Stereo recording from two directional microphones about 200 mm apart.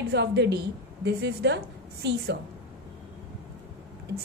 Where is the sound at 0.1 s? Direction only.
60° right (ahead or behind).